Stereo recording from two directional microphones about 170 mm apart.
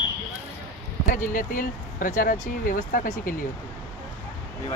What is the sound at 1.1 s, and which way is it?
Speech, 50° left (ahead or behind).